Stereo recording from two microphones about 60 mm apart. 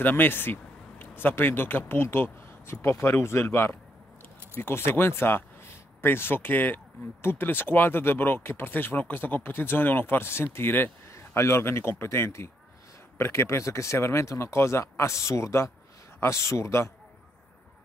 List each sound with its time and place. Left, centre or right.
0.0 s speech: left
11.1 s speech: left